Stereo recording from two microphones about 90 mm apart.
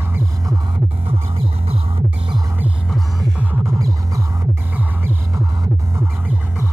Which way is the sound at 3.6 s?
40° right (ahead or behind).